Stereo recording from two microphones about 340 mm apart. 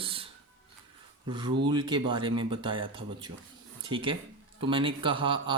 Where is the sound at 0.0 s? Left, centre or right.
Centre.